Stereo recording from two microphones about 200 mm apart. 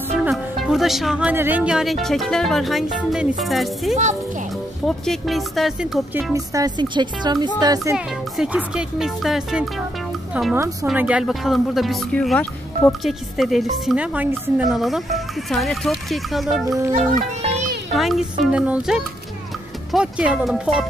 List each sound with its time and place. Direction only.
0.2 s speech: 5° right (ahead or behind)
3.9 s speech: 35° right (ahead or behind)
4.8 s speech: centre (ahead or behind)
6.3 s speech: 15° right (ahead or behind)
7.9 s a woman's voice: 5° right (ahead or behind)
17.9 s speech: centre (ahead or behind)